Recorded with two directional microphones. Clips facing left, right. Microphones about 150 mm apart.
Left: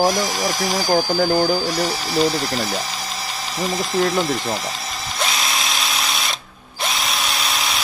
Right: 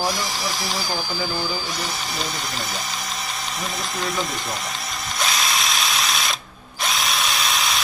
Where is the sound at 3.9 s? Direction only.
30° left (ahead or behind).